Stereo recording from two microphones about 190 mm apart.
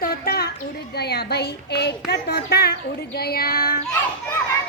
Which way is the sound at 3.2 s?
55° left (ahead or behind).